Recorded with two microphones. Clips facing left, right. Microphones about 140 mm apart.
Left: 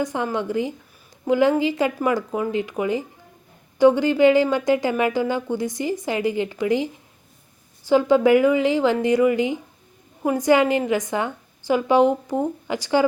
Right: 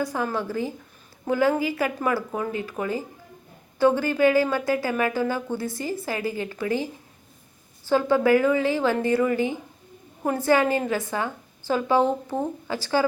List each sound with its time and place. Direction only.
0.0 s a woman's voice: 20° left (ahead or behind)